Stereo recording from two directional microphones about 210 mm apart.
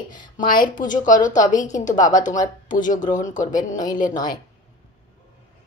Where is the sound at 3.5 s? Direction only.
20° left (ahead or behind).